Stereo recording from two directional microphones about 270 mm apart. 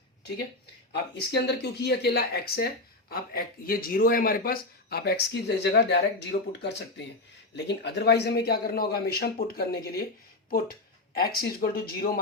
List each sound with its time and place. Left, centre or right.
1.3 s speech: left